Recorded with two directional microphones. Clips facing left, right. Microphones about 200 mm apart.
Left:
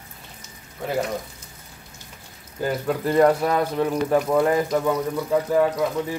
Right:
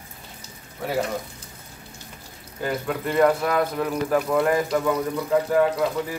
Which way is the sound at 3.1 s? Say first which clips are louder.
Left 2 dB; 35° left (ahead or behind).